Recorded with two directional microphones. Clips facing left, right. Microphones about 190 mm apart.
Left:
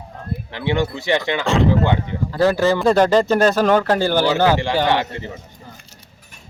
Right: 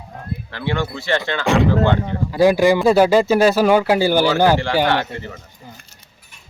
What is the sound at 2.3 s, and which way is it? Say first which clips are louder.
Speech: right 3 dB; 15° right (ahead or behind).